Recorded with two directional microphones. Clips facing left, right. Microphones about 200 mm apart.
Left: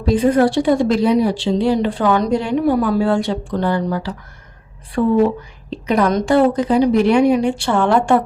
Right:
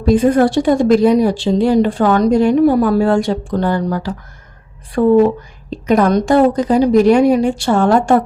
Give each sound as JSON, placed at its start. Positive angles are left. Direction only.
{"t": 0.0, "sound": "a woman's voice", "side_deg": -50}
{"t": 5.0, "sound": "a woman's voice", "side_deg": -45}